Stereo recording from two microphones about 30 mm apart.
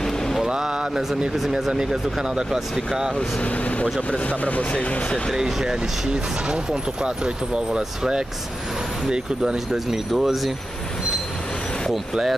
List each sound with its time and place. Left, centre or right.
1.5 s speech: right
3.4 s speech: left
4.7 s speech: left
5.3 s speech: centre
9.8 s speech: centre
11.9 s speech: centre